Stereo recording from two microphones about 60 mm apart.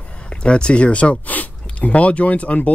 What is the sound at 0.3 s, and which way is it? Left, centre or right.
Speech, centre.